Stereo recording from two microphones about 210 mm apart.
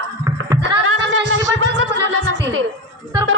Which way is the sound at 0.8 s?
60° right (ahead or behind).